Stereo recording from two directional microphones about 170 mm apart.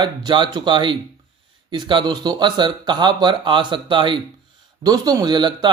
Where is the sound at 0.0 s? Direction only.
25° right (ahead or behind).